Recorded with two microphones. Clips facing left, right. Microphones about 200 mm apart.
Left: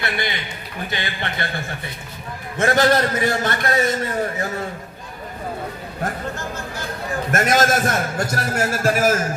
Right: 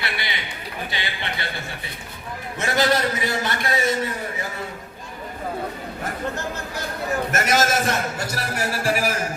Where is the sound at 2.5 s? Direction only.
50° left (ahead or behind).